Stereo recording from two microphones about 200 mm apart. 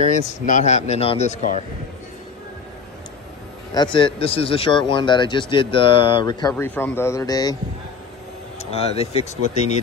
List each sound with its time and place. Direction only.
0.0 s speech: 40° left (ahead or behind)
3.7 s speech: 25° left (ahead or behind)
6.5 s a man's voice: 10° left (ahead or behind)
8.5 s speech: 30° left (ahead or behind)